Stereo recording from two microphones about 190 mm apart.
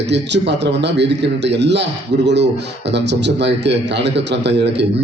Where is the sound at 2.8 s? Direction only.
65° right (ahead or behind).